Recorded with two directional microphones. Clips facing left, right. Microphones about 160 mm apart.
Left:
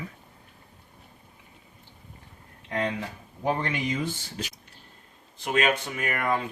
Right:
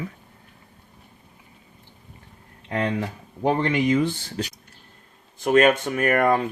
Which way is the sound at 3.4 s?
60° right (ahead or behind).